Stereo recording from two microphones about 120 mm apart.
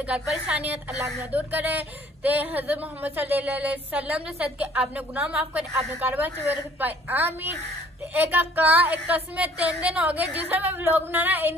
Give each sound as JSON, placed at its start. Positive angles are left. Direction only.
{"t": 0.1, "sound": "speech", "side_deg": -10}